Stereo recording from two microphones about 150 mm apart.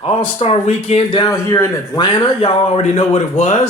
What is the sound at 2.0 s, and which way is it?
Speech, 30° left (ahead or behind).